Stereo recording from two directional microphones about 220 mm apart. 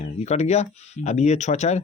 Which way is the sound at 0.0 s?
30° left (ahead or behind).